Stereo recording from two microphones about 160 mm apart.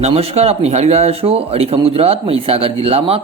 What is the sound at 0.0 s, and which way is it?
Speech, 40° right (ahead or behind).